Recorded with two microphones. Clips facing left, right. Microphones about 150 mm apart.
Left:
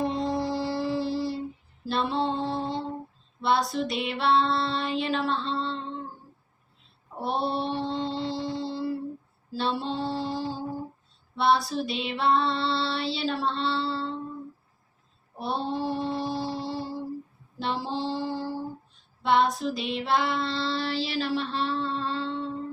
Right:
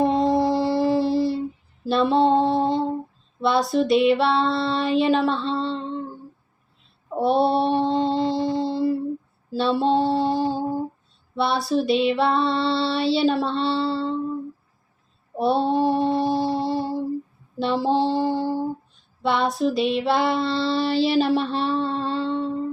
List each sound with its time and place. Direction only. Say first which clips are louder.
0.0 s music: right 8 dB; 65° right (ahead or behind)
1.8 s a sound: right 8 dB; 65° right (ahead or behind)
3.4 s female singing: right 5 dB; 70° right (ahead or behind)
7.2 s mantra: right 9 dB; 70° right (ahead or behind)
9.5 s a sound: right 9 dB; 65° right (ahead or behind)
11.4 s female singing: right 2 dB; 65° right (ahead or behind)
15.4 s mantra: right 9 dB; 70° right (ahead or behind)
19.3 s female singing: right 2 dB; 70° right (ahead or behind)